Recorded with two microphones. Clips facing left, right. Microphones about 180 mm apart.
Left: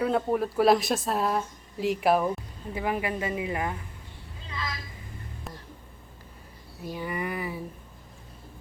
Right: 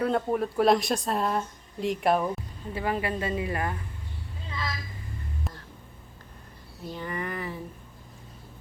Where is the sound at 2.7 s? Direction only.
15° left (ahead or behind).